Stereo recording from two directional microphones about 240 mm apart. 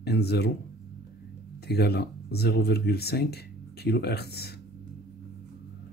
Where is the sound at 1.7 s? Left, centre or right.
Left.